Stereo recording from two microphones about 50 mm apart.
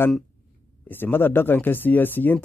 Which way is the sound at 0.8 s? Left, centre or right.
Left.